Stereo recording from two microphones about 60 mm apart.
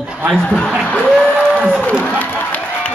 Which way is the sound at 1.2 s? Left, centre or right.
Centre.